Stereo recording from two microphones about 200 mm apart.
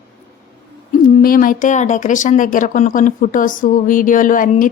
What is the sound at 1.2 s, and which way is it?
Speech, 45° left (ahead or behind).